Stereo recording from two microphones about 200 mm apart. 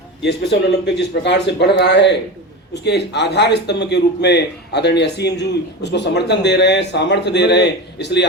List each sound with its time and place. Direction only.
0.2 s a man's voice: 60° left (ahead or behind)